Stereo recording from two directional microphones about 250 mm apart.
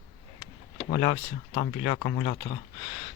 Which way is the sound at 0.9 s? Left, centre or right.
Left.